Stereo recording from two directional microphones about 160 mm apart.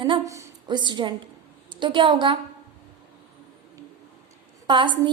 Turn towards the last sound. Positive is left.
turn(degrees=-30)  # may be behind; listen again after turning